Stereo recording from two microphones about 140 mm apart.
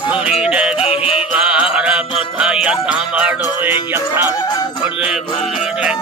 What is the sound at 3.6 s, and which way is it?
Music, 15° right (ahead or behind).